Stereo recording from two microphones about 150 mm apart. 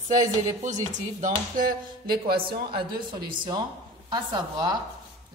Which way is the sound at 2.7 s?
30° right (ahead or behind).